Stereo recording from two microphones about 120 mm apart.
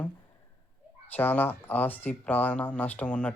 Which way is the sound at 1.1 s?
15° left (ahead or behind).